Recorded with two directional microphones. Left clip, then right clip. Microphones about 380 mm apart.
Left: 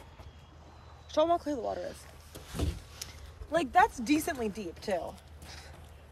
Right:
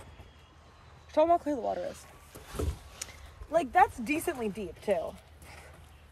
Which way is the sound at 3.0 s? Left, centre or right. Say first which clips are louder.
Right 2 dB; centre.